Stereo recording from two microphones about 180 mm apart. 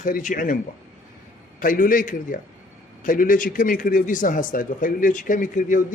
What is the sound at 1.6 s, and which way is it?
Speech, 50° left (ahead or behind).